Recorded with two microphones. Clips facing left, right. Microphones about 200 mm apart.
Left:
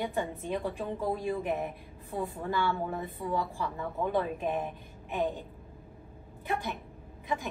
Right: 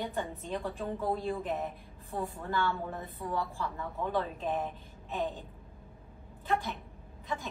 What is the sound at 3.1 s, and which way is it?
A woman's voice, 15° left (ahead or behind).